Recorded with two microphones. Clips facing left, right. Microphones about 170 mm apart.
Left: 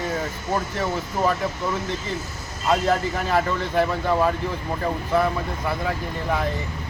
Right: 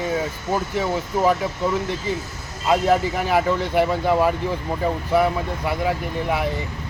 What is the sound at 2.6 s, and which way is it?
Speech, 10° right (ahead or behind).